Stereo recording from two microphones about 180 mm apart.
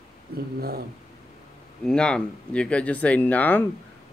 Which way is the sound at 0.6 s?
60° right (ahead or behind).